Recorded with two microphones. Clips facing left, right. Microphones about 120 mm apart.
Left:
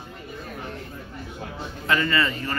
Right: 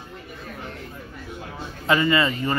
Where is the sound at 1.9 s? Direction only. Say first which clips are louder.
Right 3 dB; 20° right (ahead or behind).